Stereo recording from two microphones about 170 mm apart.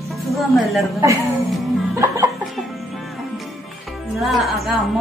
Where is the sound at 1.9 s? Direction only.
15° right (ahead or behind).